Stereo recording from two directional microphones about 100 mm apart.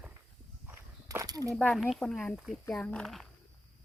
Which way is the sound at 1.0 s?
35° right (ahead or behind).